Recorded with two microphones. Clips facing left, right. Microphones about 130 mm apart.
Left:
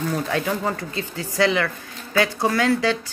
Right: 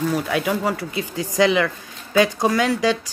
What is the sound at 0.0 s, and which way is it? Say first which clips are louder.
Speech: right 2 dB; 10° right (ahead or behind).